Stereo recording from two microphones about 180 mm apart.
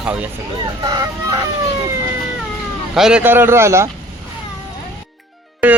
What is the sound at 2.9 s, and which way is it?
Speech, 5° right (ahead or behind).